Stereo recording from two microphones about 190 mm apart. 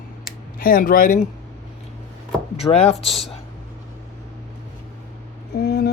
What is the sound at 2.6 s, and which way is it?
Speech, 35° left (ahead or behind).